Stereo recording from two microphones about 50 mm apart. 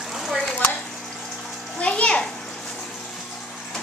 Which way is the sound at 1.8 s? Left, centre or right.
Left.